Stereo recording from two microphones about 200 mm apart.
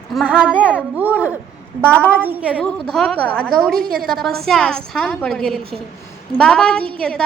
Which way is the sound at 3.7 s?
50° right (ahead or behind).